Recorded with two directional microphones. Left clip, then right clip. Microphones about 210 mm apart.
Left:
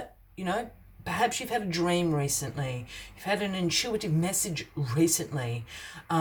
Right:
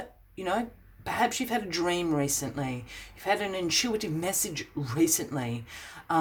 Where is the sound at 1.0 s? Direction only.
25° right (ahead or behind).